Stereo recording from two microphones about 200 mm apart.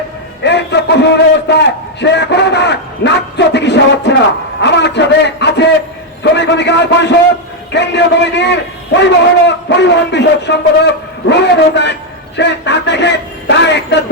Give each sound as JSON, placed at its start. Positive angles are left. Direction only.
{"t": 0.4, "sound": "a man's voice", "side_deg": 60}